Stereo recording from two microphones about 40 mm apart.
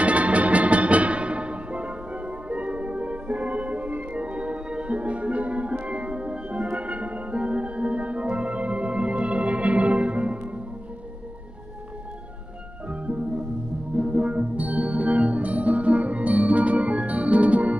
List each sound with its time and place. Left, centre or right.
0.0 s music: right
12.9 s music: right